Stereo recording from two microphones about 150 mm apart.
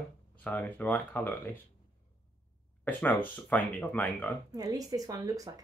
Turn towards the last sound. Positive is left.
turn(degrees=-25)  # may be behind; listen again after turning